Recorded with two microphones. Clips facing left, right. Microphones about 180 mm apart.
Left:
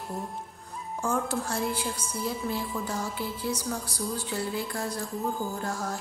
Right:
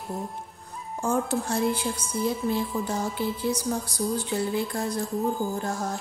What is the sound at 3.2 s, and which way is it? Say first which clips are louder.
Music: right 5 dB; 20° right (ahead or behind).